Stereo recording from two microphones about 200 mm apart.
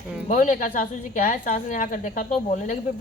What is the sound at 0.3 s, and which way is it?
Speech, 40° left (ahead or behind).